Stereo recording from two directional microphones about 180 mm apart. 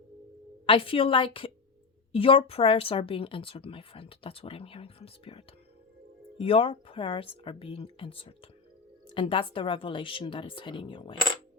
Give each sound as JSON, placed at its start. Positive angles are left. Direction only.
{"t": 0.6, "sound": "speech", "side_deg": 30}